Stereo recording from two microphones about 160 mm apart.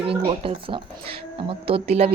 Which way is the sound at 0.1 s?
35° right (ahead or behind).